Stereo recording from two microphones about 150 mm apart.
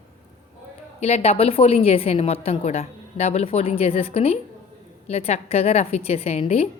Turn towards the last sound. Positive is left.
turn(degrees=40)  # may be behind; listen again after turning